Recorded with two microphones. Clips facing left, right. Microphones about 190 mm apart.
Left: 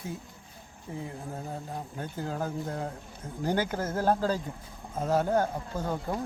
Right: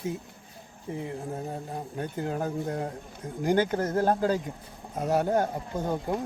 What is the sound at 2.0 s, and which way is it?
Speech, 20° right (ahead or behind).